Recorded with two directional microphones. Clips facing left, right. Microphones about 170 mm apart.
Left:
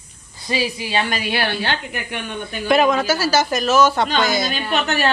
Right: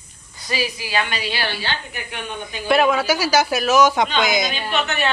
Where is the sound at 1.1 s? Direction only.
55° left (ahead or behind).